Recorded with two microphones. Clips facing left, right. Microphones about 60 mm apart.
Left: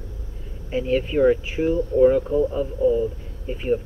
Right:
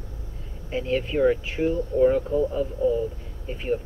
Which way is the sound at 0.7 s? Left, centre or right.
Centre.